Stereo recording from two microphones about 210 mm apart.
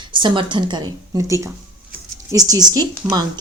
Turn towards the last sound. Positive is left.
turn(degrees=-10)  # may be behind; listen again after turning